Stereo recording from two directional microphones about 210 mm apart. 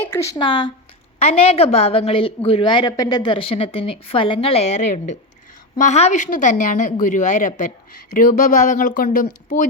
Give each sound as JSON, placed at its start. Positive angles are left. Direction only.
{"t": 0.3, "sound": "a woman's voice", "side_deg": 20}